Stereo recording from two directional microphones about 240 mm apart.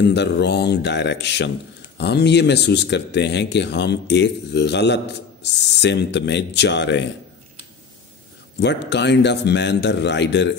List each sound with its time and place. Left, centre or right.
0.1 s speech: left
8.5 s speech: left